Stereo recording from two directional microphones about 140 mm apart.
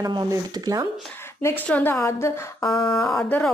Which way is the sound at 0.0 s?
25° right (ahead or behind).